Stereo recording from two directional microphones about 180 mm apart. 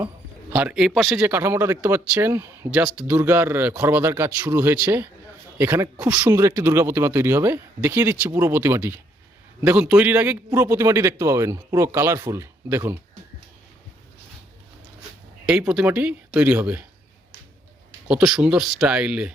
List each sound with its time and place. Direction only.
0.5 s speech: 5° right (ahead or behind)
1.3 s speech: 10° right (ahead or behind)
15.4 s speech: 5° right (ahead or behind)
18.1 s speech: centre (ahead or behind)